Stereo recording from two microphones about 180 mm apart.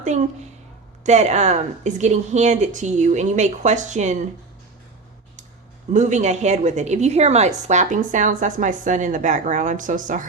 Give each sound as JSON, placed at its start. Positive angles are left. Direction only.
{"t": 0.0, "sound": "a woman's voice", "side_deg": -40}
{"t": 5.9, "sound": "speech", "side_deg": -40}